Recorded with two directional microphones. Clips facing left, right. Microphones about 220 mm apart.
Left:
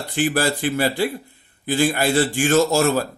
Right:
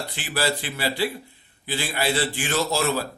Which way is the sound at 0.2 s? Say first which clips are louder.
Left 7 dB; 45° left (ahead or behind).